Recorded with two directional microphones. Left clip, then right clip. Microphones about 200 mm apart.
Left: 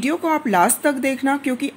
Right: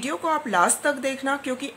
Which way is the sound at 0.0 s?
15° left (ahead or behind).